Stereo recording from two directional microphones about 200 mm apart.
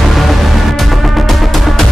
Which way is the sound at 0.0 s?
Centre (ahead or behind).